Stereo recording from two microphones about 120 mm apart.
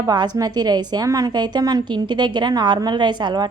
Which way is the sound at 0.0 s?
35° right (ahead or behind).